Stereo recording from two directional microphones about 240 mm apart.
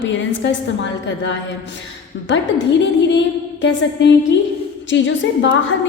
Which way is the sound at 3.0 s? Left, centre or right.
Left.